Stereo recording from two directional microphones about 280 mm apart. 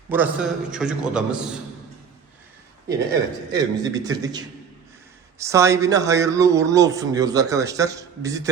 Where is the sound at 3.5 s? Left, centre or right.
Centre.